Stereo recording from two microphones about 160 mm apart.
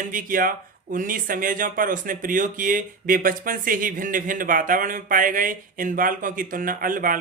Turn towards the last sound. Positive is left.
turn(degrees=-60)  # may be behind; listen again after turning